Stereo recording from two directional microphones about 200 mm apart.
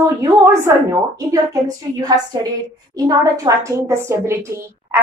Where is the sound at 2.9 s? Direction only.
20° right (ahead or behind).